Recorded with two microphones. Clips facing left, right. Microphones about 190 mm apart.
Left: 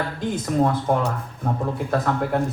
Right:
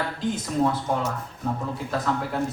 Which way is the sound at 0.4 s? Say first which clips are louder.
Left 4 dB; 55° left (ahead or behind).